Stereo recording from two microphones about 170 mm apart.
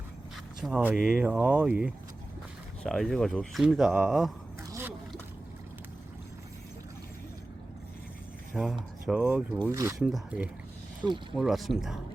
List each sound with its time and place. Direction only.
0.6 s speech: 10° right (ahead or behind)
2.8 s speech: 5° left (ahead or behind)
4.7 s slosh: 15° right (ahead or behind)
8.5 s speech: centre (ahead or behind)
9.6 s speech: 15° right (ahead or behind)
10.0 s speech: centre (ahead or behind)